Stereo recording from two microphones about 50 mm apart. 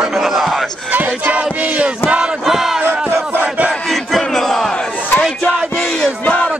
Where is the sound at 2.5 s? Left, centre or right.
Centre.